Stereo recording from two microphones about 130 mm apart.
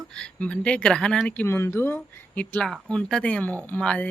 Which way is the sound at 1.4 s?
20° left (ahead or behind).